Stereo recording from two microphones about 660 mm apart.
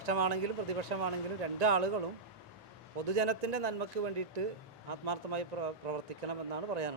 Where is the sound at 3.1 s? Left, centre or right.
Right.